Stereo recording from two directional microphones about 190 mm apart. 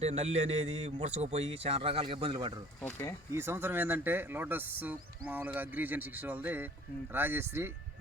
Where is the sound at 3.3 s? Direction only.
10° right (ahead or behind).